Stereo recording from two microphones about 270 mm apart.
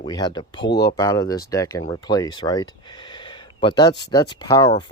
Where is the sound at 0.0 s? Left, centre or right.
Centre.